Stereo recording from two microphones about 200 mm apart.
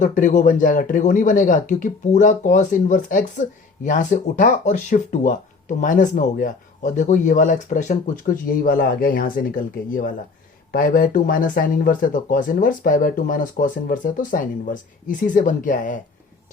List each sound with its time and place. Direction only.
0.0 s speech: 40° left (ahead or behind)